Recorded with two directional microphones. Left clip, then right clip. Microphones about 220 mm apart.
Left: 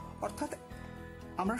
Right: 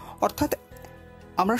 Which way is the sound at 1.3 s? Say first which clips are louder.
Right 11 dB; 25° right (ahead or behind).